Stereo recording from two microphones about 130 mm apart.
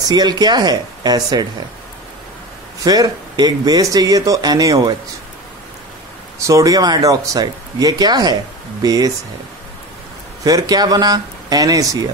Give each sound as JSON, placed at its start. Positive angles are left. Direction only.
{"t": 0.0, "sound": "speech", "side_deg": -30}
{"t": 2.8, "sound": "speech", "side_deg": -30}
{"t": 6.4, "sound": "speech", "side_deg": -25}
{"t": 10.4, "sound": "speech", "side_deg": -30}